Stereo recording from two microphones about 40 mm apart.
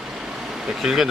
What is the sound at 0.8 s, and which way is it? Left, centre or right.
Speech, centre.